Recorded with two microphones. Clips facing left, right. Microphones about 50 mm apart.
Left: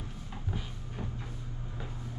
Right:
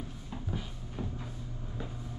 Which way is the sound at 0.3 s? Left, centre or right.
Centre.